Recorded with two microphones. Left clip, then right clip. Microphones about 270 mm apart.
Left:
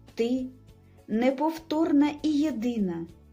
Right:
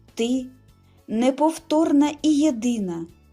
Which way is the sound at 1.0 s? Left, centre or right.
Right.